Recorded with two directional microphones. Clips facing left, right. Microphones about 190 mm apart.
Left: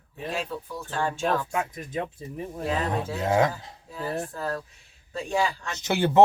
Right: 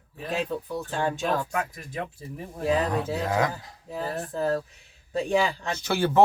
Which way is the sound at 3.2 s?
25° left (ahead or behind).